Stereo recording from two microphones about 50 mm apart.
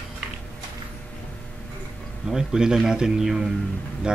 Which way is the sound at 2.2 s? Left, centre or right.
Centre.